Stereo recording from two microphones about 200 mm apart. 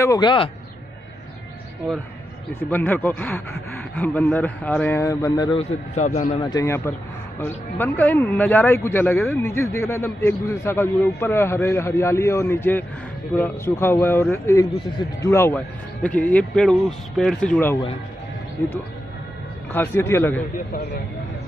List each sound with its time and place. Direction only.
0.0 s speech: 20° left (ahead or behind)
2.7 s speech: 10° left (ahead or behind); by 6.4 s 35° left (ahead or behind)
6.4 s speech: 15° left (ahead or behind)
19.7 s speech: 10° left (ahead or behind)
20.5 s a man's voice: 55° left (ahead or behind)